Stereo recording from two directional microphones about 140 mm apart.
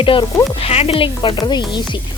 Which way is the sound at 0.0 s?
40° left (ahead or behind).